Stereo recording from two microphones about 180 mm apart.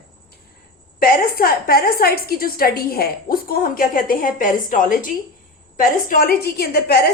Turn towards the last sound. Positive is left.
turn(degrees=60)  # may be behind; listen again after turning